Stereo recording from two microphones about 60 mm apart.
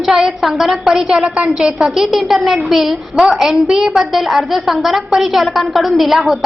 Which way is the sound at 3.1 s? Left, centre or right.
Centre.